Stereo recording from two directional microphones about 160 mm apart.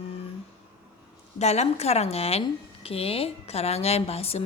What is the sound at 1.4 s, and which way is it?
A woman's voice, 45° left (ahead or behind).